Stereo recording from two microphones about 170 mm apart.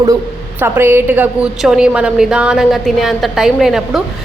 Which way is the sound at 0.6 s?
15° right (ahead or behind).